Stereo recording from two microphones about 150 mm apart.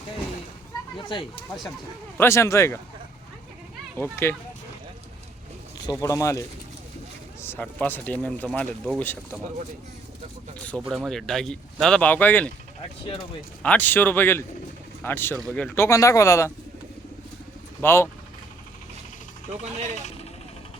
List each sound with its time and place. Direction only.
0.9 s speech: 30° left (ahead or behind)
2.1 s speech: 15° left (ahead or behind)
3.9 s speech: 15° left (ahead or behind)
5.9 s speech: 20° left (ahead or behind)
7.4 s speech: 10° left (ahead or behind)
10.8 s speech: centre (ahead or behind)
13.6 s speech: 10° left (ahead or behind)
17.7 s speech: 15° left (ahead or behind)